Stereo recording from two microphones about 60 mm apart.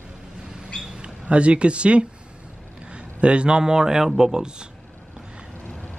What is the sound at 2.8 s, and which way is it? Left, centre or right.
A man's voice, centre.